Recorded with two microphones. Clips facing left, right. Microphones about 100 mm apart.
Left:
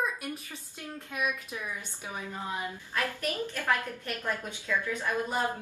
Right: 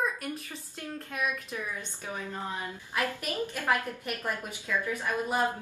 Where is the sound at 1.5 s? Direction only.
15° left (ahead or behind).